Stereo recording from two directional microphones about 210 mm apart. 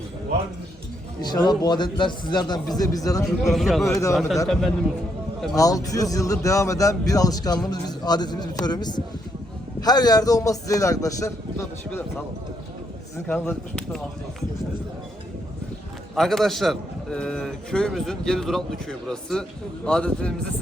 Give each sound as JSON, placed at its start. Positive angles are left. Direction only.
{"t": 1.2, "sound": "a man's voice", "side_deg": 20}
{"t": 3.2, "sound": "a man's voice", "side_deg": 0}
{"t": 5.5, "sound": "a man's voice", "side_deg": 15}
{"t": 13.2, "sound": "a man's voice", "side_deg": 5}
{"t": 16.1, "sound": "a man's voice", "side_deg": 0}